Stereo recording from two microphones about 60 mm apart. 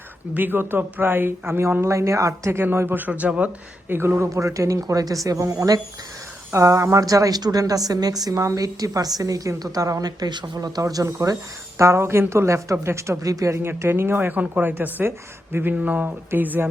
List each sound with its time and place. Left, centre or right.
0.3 s speech: right
1.8 s speech: right
2.5 s speech: right
3.1 s speech: right
3.8 s speech: right
4.2 s speech: right
6.5 s a woman's voice: right
11.8 s speech: right
13.6 s speech: right